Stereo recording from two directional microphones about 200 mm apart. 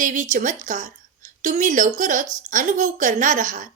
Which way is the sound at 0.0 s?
40° right (ahead or behind).